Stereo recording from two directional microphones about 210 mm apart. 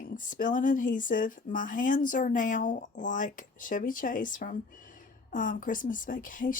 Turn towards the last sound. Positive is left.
turn(degrees=40)  # may be behind; listen again after turning